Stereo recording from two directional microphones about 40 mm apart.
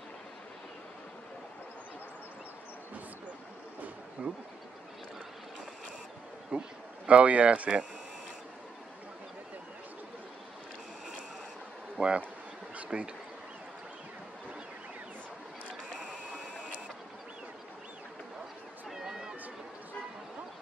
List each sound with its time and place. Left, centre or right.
4.2 s speech: right
6.5 s speech: right
12.0 s speech: right
12.7 s bee: right
19.0 s a sound: centre